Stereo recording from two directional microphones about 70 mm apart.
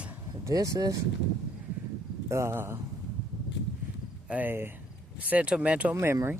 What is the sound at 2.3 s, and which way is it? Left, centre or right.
Speech, right.